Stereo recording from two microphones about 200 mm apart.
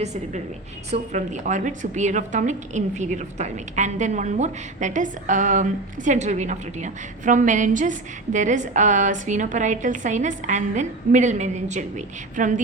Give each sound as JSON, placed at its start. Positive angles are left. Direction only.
{"t": 0.0, "sound": "a woman's voice", "side_deg": -35}